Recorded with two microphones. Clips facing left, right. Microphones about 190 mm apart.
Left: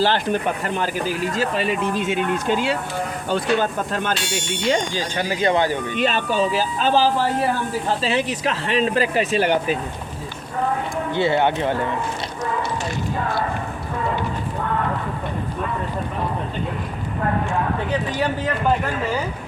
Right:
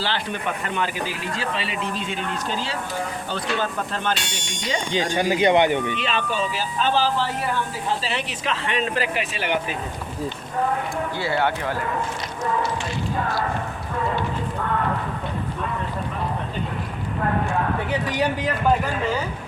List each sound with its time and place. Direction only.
0.0 s speech: 45° left (ahead or behind)
4.9 s speech: 15° right (ahead or behind)
6.0 s speech: 40° left (ahead or behind)
11.1 s speech: 20° left (ahead or behind)